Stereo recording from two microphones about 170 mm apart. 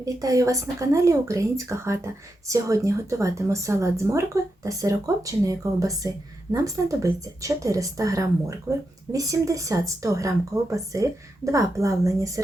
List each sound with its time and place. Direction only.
0.0 s a woman's voice: 20° right (ahead or behind)